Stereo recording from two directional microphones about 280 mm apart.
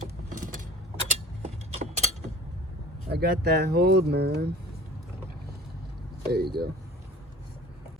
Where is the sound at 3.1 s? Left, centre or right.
Right.